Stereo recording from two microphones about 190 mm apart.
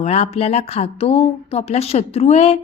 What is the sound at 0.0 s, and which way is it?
A woman's voice, 35° left (ahead or behind).